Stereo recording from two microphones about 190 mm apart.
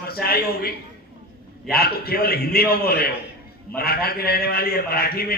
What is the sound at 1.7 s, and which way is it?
A man's voice, 55° left (ahead or behind).